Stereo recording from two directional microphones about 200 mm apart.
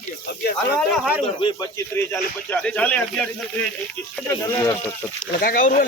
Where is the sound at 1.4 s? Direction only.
25° left (ahead or behind).